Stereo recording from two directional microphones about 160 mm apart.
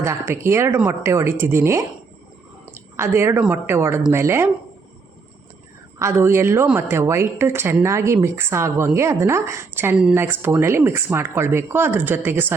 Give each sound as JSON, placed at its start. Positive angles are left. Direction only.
{"t": 0.0, "sound": "a woman's voice", "side_deg": -15}
{"t": 2.9, "sound": "a woman's voice", "side_deg": -15}
{"t": 6.0, "sound": "a woman's voice", "side_deg": -15}